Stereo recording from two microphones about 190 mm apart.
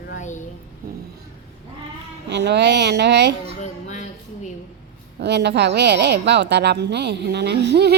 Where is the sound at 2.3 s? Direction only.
65° right (ahead or behind).